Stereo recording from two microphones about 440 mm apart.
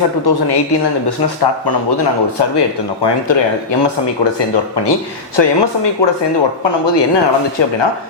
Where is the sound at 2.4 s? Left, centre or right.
Left.